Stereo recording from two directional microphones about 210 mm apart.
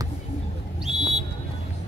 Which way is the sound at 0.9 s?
Centre (ahead or behind).